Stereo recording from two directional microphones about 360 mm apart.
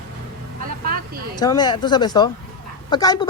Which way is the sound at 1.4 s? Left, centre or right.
Centre.